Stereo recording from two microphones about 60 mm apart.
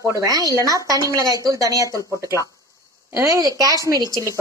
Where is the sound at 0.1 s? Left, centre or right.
Right.